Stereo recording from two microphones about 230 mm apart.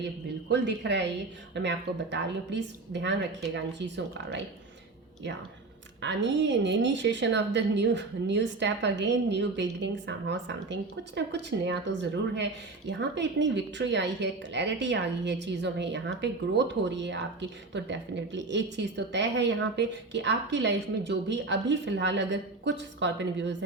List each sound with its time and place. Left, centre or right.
0.4 s a woman's voice: right
6.0 s a woman's voice: right